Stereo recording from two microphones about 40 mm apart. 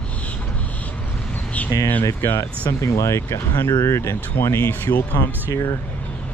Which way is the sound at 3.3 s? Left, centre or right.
Left.